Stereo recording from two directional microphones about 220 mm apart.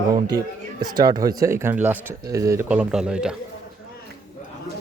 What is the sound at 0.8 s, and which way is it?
Speech, 15° right (ahead or behind).